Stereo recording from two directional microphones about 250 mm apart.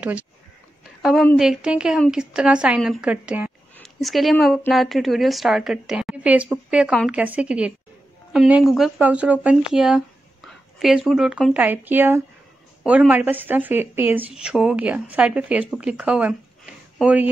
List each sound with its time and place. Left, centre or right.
1.0 s a woman's voice: centre